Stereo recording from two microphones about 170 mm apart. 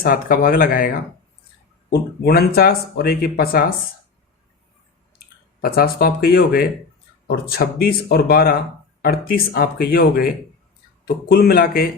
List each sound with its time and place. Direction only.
0.0 s speech: 55° left (ahead or behind)
1.9 s speech: 65° left (ahead or behind)
5.5 s speech: 60° left (ahead or behind)